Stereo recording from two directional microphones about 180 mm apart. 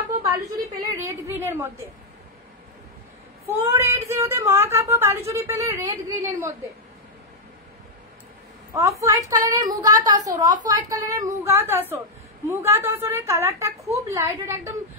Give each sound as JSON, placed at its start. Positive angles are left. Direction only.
{"t": 0.5, "sound": "a sound", "side_deg": -15}
{"t": 3.4, "sound": "speech", "side_deg": -10}
{"t": 9.0, "sound": "a woman's voice", "side_deg": -20}